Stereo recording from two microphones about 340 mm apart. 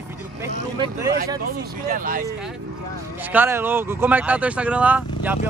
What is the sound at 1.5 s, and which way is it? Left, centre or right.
Speech, right.